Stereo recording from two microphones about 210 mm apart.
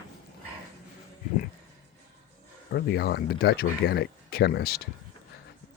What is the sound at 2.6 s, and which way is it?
Speech, 50° left (ahead or behind).